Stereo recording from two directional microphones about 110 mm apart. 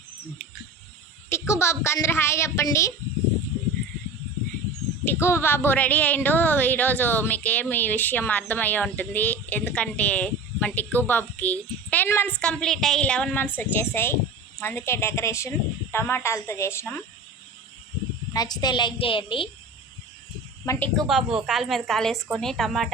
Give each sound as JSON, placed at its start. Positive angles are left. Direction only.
{"t": 1.3, "sound": "speech", "side_deg": 25}
{"t": 5.0, "sound": "speech", "side_deg": 25}
{"t": 12.3, "sound": "speech", "side_deg": 10}
{"t": 18.3, "sound": "a woman's voice", "side_deg": 40}
{"t": 20.7, "sound": "speech", "side_deg": 30}
{"t": 21.1, "sound": "a woman's voice", "side_deg": -5}